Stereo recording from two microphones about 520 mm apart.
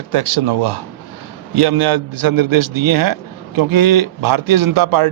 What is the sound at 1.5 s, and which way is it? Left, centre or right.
A man's voice, right.